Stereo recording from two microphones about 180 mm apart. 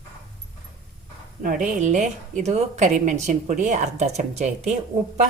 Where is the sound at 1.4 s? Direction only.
45° right (ahead or behind).